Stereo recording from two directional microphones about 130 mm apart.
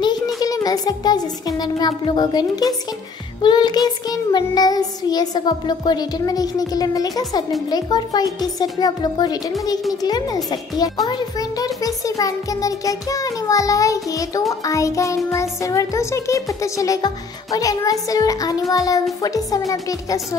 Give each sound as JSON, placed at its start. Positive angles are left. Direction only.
{"t": 0.4, "sound": "child singing", "side_deg": 30}
{"t": 10.0, "sound": "music", "side_deg": 30}